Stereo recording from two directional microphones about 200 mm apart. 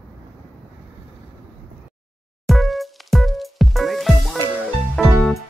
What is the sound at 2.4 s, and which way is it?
Music, centre (ahead or behind).